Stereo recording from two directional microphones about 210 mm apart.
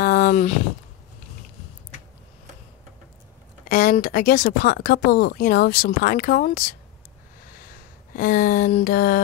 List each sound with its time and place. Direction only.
0.0 s a sound: 40° left (ahead or behind)
3.6 s speech: 45° left (ahead or behind)
8.2 s speech: 45° left (ahead or behind)